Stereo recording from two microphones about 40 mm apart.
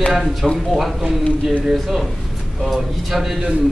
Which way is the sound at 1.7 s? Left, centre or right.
Centre.